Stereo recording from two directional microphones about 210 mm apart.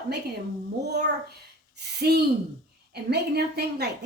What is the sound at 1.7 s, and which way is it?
A woman's voice, 50° right (ahead or behind).